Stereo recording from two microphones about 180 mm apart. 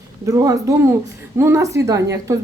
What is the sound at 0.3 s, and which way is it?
Speech, 20° right (ahead or behind).